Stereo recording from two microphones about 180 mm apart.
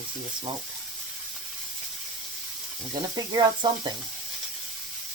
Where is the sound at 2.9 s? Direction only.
25° right (ahead or behind).